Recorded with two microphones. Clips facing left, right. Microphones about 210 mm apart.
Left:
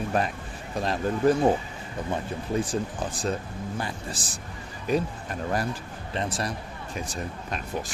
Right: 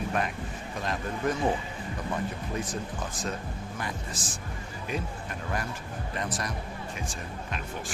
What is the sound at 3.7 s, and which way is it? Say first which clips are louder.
Speech: left 3 dB; 35° left (ahead or behind).